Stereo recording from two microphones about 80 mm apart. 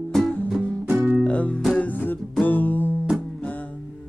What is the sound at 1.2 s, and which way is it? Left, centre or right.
Music, centre.